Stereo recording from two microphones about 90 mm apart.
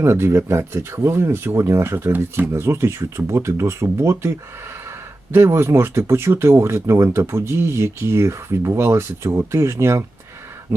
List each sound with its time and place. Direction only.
0.0 s speech: 25° right (ahead or behind)